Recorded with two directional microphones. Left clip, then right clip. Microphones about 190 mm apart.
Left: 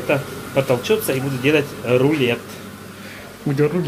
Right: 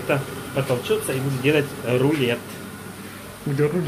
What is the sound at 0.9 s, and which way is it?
Speech, 30° left (ahead or behind).